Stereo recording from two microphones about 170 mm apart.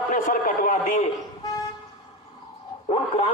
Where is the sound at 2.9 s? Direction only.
35° left (ahead or behind).